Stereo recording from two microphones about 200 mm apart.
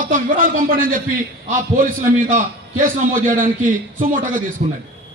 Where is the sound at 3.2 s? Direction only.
40° right (ahead or behind).